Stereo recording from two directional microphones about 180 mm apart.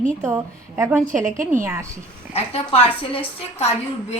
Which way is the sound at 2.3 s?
35° left (ahead or behind).